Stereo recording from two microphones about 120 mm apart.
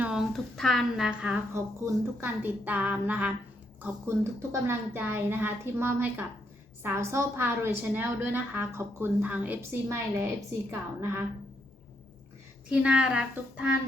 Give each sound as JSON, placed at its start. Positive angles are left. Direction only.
{"t": 0.0, "sound": "a woman's voice", "side_deg": -5}
{"t": 12.6, "sound": "a woman's voice", "side_deg": -10}